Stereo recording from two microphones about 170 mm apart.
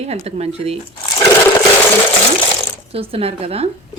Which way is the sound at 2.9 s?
35° right (ahead or behind).